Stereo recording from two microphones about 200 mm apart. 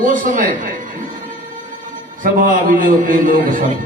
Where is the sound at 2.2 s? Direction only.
40° right (ahead or behind).